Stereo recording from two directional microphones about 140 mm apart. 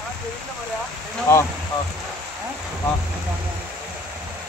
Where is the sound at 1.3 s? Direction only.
20° left (ahead or behind).